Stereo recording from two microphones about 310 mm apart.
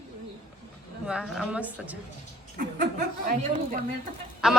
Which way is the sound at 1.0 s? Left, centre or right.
Centre.